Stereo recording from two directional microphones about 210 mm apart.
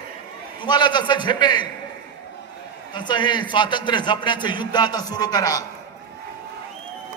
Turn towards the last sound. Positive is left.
turn(degrees=20)  # may be behind; listen again after turning